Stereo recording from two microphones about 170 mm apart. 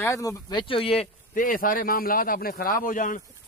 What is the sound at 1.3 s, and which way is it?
A man's voice, 50° left (ahead or behind).